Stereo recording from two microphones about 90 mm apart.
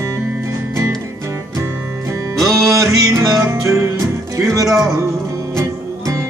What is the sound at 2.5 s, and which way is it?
Music, 35° right (ahead or behind).